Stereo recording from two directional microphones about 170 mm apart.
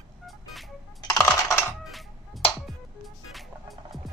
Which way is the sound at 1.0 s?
20° left (ahead or behind).